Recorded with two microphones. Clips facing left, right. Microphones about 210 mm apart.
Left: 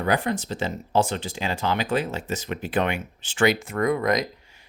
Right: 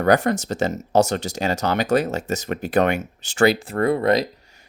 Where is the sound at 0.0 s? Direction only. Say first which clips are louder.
Right 6 dB; 45° right (ahead or behind).